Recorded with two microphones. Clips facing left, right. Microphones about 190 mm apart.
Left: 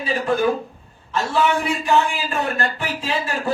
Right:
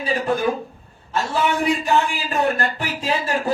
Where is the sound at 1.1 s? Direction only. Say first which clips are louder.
Left 2 dB; 40° right (ahead or behind).